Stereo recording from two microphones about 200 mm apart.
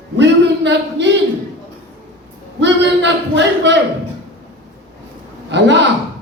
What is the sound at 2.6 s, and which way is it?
A man's voice, 60° right (ahead or behind).